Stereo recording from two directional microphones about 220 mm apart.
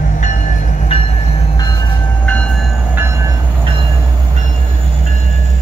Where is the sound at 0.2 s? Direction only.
35° left (ahead or behind).